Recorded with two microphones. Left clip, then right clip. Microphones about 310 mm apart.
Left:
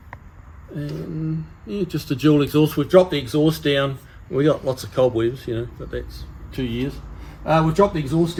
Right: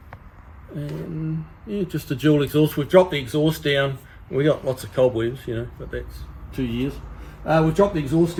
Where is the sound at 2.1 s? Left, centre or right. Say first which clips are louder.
Left 2 dB; left.